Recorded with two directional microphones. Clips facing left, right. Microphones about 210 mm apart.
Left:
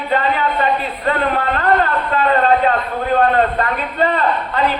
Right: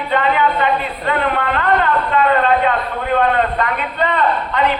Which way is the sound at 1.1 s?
35° left (ahead or behind).